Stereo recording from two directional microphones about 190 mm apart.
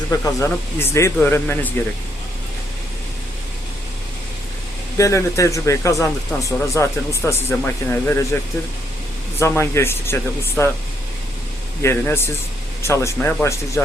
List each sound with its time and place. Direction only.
0.1 s speech: 15° left (ahead or behind)
4.9 s speech: 15° left (ahead or behind)
9.4 s speech: 15° left (ahead or behind)
11.8 s speech: 15° left (ahead or behind)